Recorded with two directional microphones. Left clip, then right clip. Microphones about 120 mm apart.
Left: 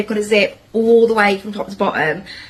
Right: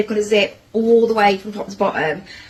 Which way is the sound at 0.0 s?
30° left (ahead or behind).